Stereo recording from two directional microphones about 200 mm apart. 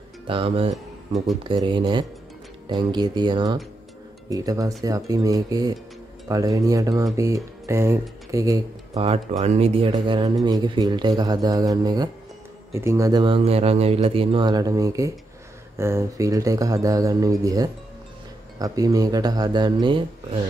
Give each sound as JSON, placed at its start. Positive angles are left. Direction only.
{"t": 0.3, "sound": "speech", "side_deg": -30}
{"t": 8.9, "sound": "speech", "side_deg": -30}